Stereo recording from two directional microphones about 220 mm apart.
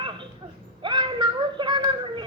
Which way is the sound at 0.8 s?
20° right (ahead or behind).